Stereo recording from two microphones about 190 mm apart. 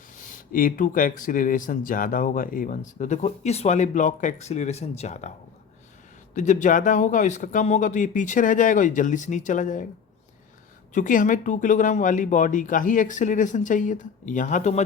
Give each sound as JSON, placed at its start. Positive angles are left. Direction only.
{"t": 0.2, "sound": "speech", "side_deg": 45}
{"t": 6.3, "sound": "speech", "side_deg": 40}
{"t": 10.9, "sound": "speech", "side_deg": 45}